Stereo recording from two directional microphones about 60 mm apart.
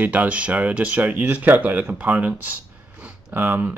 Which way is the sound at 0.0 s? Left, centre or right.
Right.